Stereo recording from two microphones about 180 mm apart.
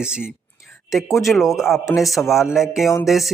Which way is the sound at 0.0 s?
5° right (ahead or behind).